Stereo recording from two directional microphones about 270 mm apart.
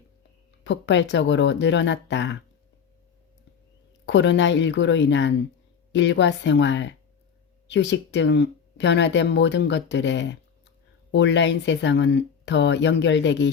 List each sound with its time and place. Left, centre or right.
0.6 s speech: left
4.0 s speech: left